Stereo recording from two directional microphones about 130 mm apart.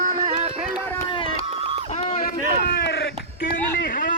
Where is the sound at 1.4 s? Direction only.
50° right (ahead or behind).